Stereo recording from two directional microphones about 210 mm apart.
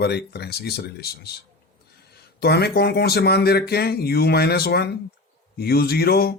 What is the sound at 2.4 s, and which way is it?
Speech, 50° left (ahead or behind).